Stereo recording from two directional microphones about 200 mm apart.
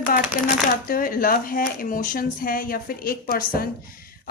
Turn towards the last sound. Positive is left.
turn(degrees=50)  # may be behind; listen again after turning